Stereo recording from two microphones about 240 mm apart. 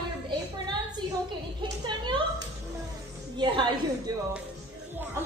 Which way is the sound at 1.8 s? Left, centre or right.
Centre.